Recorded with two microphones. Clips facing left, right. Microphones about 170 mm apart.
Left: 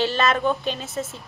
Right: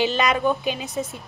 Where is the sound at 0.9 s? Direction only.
Centre (ahead or behind).